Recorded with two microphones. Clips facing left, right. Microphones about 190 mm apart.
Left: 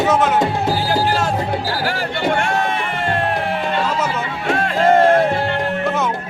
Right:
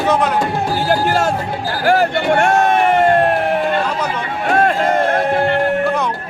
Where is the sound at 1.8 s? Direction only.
45° right (ahead or behind).